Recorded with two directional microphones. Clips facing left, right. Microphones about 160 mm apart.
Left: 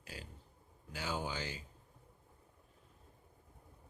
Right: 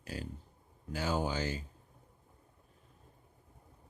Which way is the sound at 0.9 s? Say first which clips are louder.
Right 6 dB; 45° right (ahead or behind).